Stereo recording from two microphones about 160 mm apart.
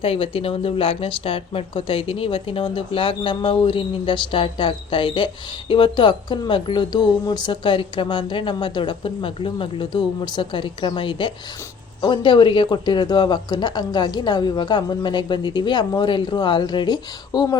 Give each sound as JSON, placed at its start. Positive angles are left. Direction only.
{"t": 0.0, "sound": "speech", "side_deg": 35}